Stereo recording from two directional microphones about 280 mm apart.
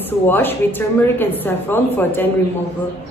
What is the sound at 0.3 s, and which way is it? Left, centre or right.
A woman's voice, centre.